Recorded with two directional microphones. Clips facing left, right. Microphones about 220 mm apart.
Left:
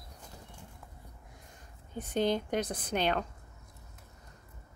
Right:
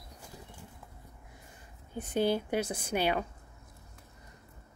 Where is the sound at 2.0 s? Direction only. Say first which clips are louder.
Right 1 dB; 10° right (ahead or behind).